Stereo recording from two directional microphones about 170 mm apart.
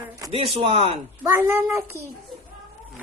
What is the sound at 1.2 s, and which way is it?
Speech, 15° right (ahead or behind).